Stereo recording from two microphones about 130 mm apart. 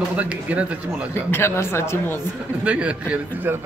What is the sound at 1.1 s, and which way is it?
Speech, 20° left (ahead or behind).